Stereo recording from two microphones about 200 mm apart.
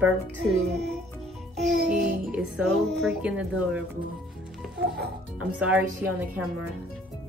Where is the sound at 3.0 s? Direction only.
Centre (ahead or behind).